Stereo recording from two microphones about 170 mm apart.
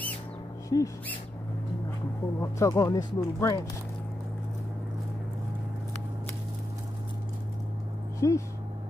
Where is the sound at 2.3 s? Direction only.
15° left (ahead or behind).